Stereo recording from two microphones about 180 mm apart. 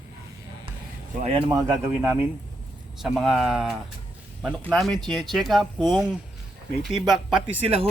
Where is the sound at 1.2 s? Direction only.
30° right (ahead or behind).